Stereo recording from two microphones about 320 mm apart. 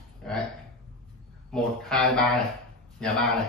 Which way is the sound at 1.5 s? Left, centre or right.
Centre.